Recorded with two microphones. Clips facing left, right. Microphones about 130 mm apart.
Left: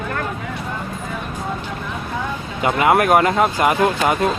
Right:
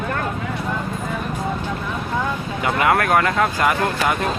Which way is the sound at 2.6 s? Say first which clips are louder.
Left 3 dB; 20° left (ahead or behind).